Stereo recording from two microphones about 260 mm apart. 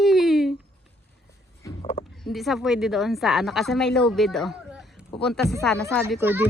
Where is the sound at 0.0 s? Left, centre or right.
Centre.